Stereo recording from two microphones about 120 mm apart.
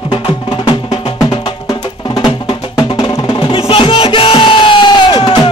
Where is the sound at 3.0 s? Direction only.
45° left (ahead or behind).